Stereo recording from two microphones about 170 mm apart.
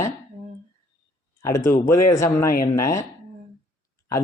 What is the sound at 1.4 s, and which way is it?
A man's voice, 20° left (ahead or behind).